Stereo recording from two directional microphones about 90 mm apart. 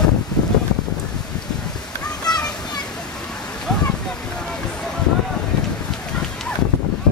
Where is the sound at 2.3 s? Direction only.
50° left (ahead or behind).